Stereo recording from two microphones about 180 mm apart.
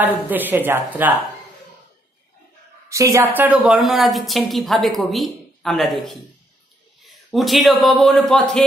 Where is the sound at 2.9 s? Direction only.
15° right (ahead or behind).